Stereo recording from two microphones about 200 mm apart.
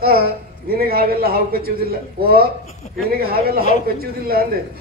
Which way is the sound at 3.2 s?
50° right (ahead or behind).